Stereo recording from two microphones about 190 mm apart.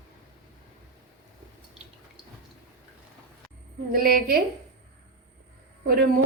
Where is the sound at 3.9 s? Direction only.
50° right (ahead or behind).